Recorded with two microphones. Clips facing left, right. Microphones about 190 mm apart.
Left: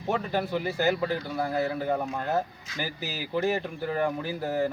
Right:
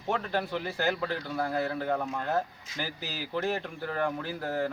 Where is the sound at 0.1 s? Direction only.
10° left (ahead or behind).